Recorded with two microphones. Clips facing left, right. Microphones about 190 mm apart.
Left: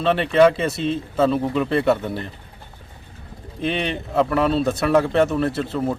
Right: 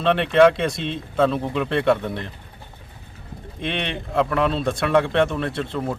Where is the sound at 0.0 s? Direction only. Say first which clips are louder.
Even; centre (ahead or behind).